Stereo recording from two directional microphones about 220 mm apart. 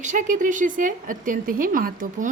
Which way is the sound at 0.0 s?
35° right (ahead or behind).